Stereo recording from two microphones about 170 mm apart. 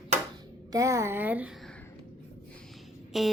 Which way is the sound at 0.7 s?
20° right (ahead or behind).